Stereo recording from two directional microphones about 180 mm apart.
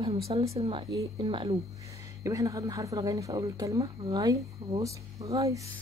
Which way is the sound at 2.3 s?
20° right (ahead or behind).